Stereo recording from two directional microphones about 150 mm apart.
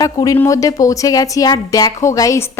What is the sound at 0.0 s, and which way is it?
A woman's voice, 25° left (ahead or behind).